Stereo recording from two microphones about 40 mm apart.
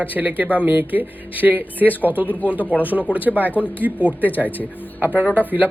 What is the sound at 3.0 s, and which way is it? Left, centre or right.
Speech, right.